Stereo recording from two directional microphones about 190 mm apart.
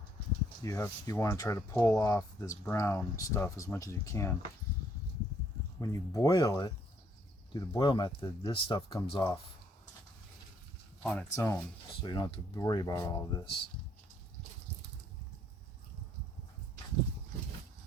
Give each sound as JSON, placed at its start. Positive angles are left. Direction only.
{"t": 0.6, "sound": "speech", "side_deg": 15}
{"t": 5.8, "sound": "speech", "side_deg": 15}
{"t": 11.0, "sound": "speech", "side_deg": 5}